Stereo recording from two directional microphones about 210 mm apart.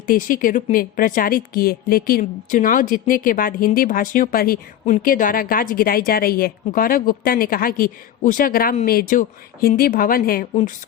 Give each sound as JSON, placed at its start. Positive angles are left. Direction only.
{"t": 0.1, "sound": "a woman's voice", "side_deg": 40}